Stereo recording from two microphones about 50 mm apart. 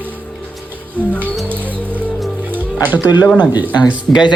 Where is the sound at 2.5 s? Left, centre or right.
Right.